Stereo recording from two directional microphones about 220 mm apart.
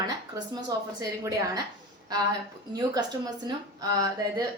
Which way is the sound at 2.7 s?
15° right (ahead or behind).